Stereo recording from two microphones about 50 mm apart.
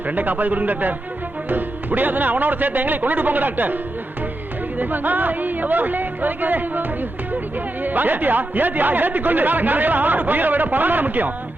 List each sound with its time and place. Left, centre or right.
0.1 s speech: right
4.8 s speech: right